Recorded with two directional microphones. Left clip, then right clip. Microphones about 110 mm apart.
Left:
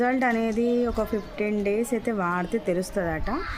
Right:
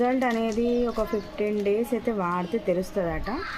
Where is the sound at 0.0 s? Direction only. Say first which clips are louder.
Left 1 dB; 40° left (ahead or behind).